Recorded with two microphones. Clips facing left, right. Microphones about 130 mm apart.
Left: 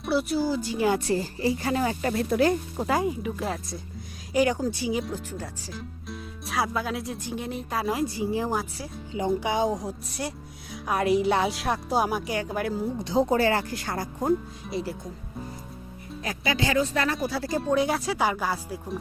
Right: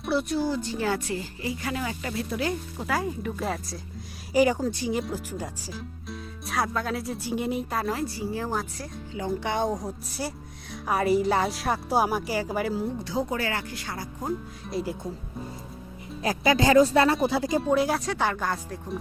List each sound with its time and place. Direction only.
0.0 s speech: centre (ahead or behind)
0.9 s speech: 35° left (ahead or behind)
2.8 s speech: 20° left (ahead or behind)
3.1 s speech: 5° left (ahead or behind)
5.3 s speech: 10° right (ahead or behind)
6.1 s music: centre (ahead or behind)
7.3 s speech: 10° right (ahead or behind)
7.9 s speech: 15° left (ahead or behind)
9.5 s speech: centre (ahead or behind)
13.0 s speech: 25° left (ahead or behind); by 14.3 s 50° left (ahead or behind)
14.8 s speech: 5° right (ahead or behind)
16.2 s speech: 40° right (ahead or behind)
17.2 s speech: 20° right (ahead or behind)
17.6 s speech: centre (ahead or behind)